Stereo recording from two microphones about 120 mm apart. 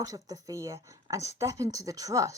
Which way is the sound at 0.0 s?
30° right (ahead or behind).